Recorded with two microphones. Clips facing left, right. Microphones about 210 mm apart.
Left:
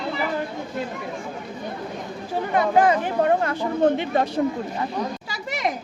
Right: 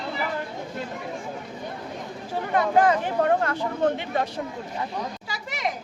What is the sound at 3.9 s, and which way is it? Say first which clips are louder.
Speech: left 5 dB; 30° left (ahead or behind).